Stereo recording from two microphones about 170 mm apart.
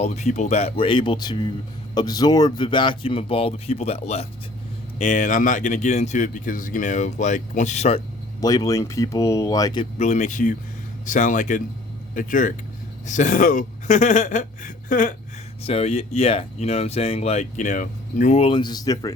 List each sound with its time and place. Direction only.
0.0 s speech: 40° left (ahead or behind)
8.4 s speech: 20° left (ahead or behind)
10.0 s speech: 45° left (ahead or behind)
15.6 s speech: 35° left (ahead or behind)
18.4 s speech: 25° left (ahead or behind)